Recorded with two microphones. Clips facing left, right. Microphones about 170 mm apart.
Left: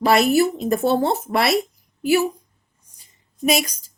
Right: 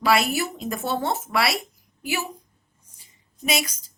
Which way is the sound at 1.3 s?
45° left (ahead or behind).